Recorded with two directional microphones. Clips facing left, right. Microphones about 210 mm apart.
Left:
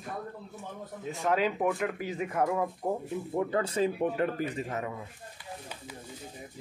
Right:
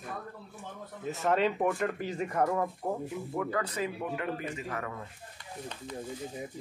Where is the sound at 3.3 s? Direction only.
25° left (ahead or behind).